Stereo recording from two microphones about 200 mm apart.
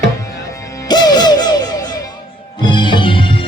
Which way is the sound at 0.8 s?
20° left (ahead or behind).